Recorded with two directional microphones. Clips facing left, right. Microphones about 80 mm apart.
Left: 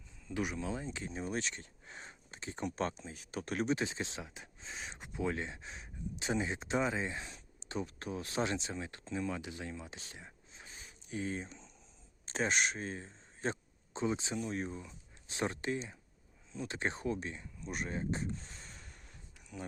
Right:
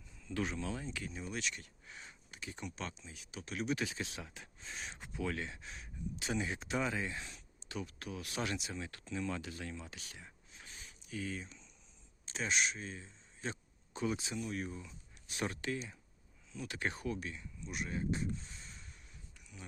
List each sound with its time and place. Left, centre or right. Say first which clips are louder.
0.3 s speech: left 1 dB; centre; by 2.6 s left
2.6 s speech: left 10 dB; left
3.7 s speech: left 3 dB; left
18.7 s a sound: left 2 dB; left